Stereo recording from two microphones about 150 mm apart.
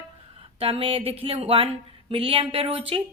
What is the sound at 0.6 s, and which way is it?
Speech, 40° right (ahead or behind).